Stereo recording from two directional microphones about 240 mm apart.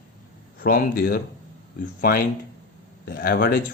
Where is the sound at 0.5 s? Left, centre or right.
Left.